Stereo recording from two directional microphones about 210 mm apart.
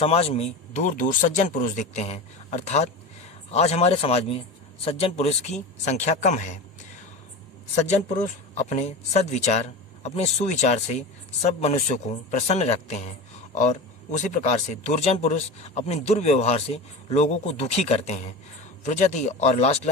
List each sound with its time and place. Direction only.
0.0 s a man's voice: 30° left (ahead or behind)
7.8 s a man's voice: 35° left (ahead or behind)